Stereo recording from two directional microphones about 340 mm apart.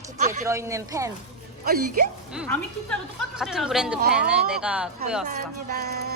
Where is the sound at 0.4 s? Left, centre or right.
Centre.